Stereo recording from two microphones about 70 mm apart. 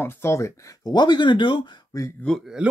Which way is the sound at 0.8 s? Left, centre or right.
Left.